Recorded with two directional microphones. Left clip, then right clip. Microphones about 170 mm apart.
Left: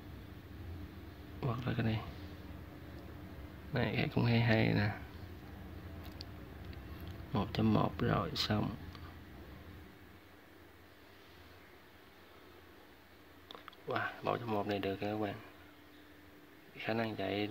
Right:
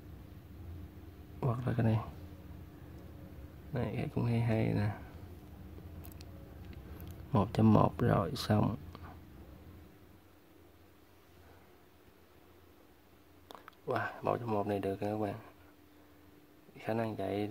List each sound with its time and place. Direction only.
1.4 s speech: 25° right (ahead or behind)
3.7 s speech: 15° right (ahead or behind)
6.7 s speech: 30° right (ahead or behind)
13.5 s speech: 30° right (ahead or behind)
16.7 s speech: 20° right (ahead or behind)